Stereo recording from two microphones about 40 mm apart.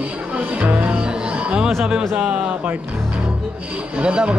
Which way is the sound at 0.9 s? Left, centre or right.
Right.